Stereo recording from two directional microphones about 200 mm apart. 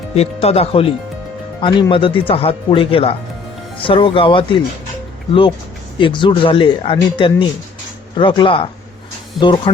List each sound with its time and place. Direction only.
0.1 s speech: 30° left (ahead or behind)
6.0 s speech: 25° left (ahead or behind)